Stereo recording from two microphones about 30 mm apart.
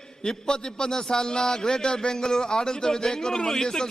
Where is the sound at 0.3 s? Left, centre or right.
Left.